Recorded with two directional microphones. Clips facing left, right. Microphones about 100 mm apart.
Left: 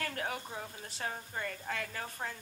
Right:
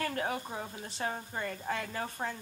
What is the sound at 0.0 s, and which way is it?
A woman's voice, 20° right (ahead or behind).